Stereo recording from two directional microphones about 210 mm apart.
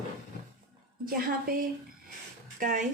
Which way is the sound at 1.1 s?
45° right (ahead or behind).